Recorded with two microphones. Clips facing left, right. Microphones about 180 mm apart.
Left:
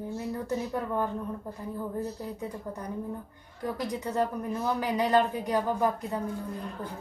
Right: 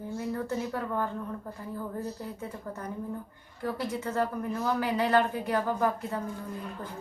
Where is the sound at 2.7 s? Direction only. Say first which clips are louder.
Right 1 dB; 15° left (ahead or behind).